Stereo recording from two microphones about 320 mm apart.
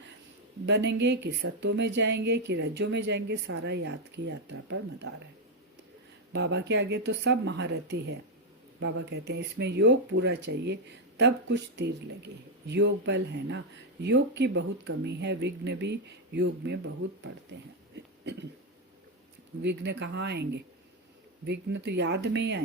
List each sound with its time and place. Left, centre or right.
0.6 s a woman's voice: right
6.3 s a woman's voice: right
19.6 s a woman's voice: right